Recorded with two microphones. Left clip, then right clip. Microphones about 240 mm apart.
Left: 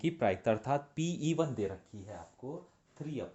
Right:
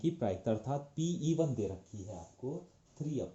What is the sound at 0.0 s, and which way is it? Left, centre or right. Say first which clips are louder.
Speech: left 4 dB; left.